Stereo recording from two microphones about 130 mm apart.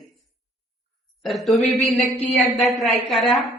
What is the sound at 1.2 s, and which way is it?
Speech, centre (ahead or behind).